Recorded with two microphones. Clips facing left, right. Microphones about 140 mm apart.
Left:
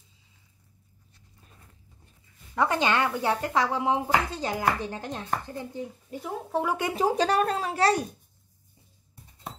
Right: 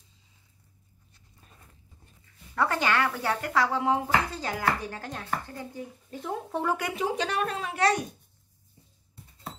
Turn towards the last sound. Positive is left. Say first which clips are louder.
# left 2 dB
turn(degrees=35)  # may be behind; listen again after turning